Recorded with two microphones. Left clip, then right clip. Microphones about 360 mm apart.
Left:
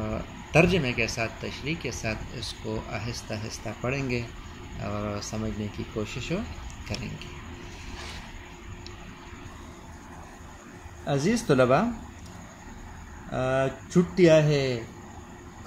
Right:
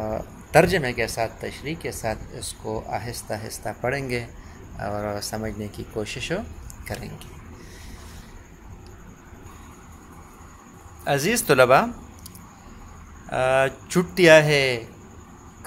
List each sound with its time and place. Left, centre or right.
0.1 s speech: right
11.1 s speech: right
13.3 s speech: right